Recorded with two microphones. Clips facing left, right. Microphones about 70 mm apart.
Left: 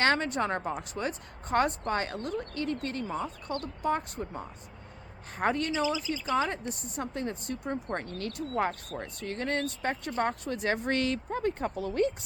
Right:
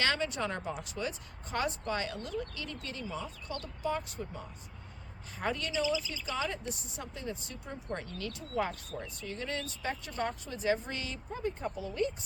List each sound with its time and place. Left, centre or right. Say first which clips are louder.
0.0 s speech: left 5 dB; left